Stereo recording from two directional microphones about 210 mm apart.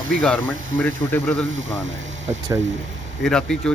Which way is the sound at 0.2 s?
5° left (ahead or behind).